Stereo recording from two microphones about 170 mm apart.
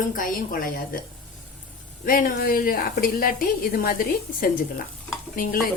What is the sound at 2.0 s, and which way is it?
A woman's voice, 55° left (ahead or behind).